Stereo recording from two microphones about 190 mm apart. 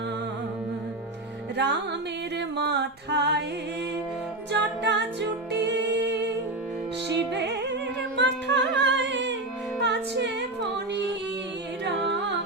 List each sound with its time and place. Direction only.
1.5 s music: 65° right (ahead or behind)
4.8 s music: 65° right (ahead or behind)
7.3 s music: 65° right (ahead or behind)